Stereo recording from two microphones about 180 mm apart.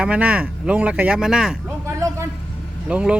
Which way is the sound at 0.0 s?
5° right (ahead or behind).